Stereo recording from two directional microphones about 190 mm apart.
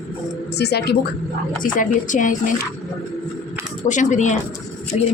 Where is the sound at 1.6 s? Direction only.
45° left (ahead or behind).